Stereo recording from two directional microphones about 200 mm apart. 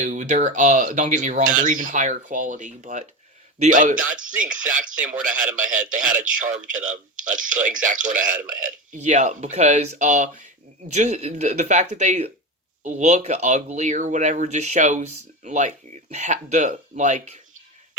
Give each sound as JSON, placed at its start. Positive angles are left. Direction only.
{"t": 0.0, "sound": "speech", "side_deg": -35}